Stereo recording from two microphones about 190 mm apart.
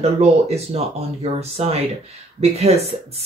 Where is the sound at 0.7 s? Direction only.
30° right (ahead or behind).